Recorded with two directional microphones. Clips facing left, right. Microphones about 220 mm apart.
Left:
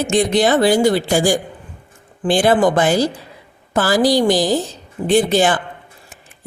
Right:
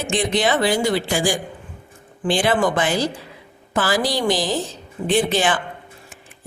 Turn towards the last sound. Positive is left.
turn(degrees=40)  # may be behind; listen again after turning